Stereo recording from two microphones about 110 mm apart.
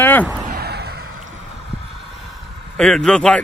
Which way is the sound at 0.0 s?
20° left (ahead or behind).